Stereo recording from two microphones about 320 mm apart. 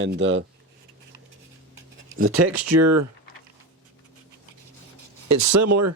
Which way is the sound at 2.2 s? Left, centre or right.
Right.